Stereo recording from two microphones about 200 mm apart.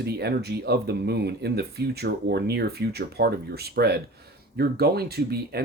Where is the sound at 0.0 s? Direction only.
55° right (ahead or behind).